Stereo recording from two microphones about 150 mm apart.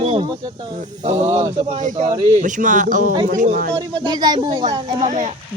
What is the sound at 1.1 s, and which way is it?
Speech, 25° right (ahead or behind).